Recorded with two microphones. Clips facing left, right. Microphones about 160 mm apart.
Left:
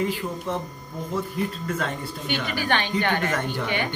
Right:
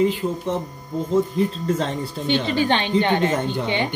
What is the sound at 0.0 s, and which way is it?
Speech, 20° right (ahead or behind).